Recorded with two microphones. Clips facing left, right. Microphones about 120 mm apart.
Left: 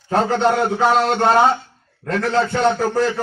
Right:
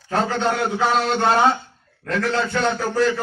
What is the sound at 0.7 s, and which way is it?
Speech, 40° left (ahead or behind).